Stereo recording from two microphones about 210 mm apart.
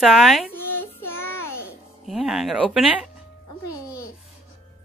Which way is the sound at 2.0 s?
Centre (ahead or behind).